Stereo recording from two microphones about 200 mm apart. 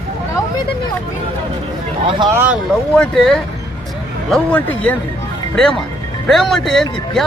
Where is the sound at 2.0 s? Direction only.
20° right (ahead or behind).